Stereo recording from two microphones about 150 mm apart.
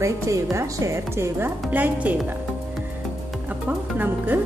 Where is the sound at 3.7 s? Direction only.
10° right (ahead or behind).